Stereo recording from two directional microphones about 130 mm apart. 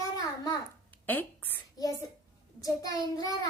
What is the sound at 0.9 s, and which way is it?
Speech, 15° left (ahead or behind).